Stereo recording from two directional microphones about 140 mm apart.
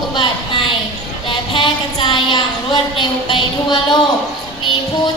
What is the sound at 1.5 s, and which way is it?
Child singing, 35° left (ahead or behind).